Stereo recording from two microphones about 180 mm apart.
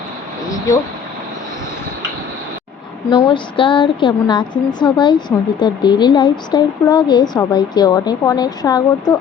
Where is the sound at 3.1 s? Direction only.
25° left (ahead or behind).